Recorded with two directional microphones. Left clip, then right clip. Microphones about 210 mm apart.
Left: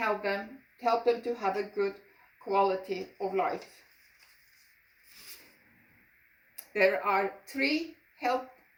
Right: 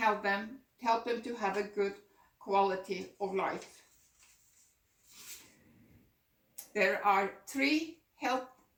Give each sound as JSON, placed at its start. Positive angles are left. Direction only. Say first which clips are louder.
{"t": 0.0, "sound": "speech", "louder": "even", "side_deg": -15}
{"t": 6.7, "sound": "speech", "louder": "left 3 dB", "side_deg": -15}